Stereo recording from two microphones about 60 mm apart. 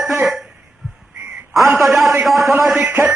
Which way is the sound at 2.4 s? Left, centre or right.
Right.